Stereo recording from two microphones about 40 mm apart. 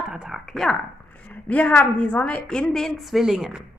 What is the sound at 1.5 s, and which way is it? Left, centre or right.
Speech, left.